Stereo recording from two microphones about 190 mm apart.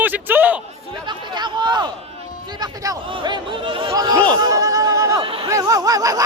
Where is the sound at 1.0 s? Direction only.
25° right (ahead or behind).